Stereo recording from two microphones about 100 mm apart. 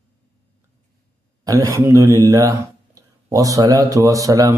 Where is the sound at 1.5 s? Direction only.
35° right (ahead or behind).